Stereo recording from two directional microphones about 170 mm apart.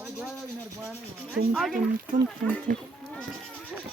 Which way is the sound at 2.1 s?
50° right (ahead or behind).